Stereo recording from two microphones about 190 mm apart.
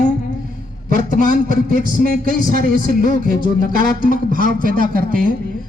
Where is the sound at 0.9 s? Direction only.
45° right (ahead or behind).